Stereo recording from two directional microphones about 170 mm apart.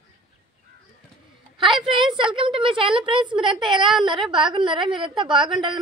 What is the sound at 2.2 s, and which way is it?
A woman's voice, 30° right (ahead or behind).